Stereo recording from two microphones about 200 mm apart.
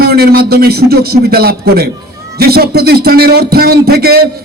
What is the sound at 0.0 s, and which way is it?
A man's voice, 50° right (ahead or behind).